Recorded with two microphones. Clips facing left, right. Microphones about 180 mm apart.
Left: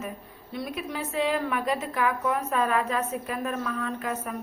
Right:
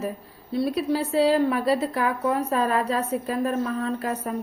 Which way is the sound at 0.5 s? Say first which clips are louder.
Right 9 dB; 30° right (ahead or behind).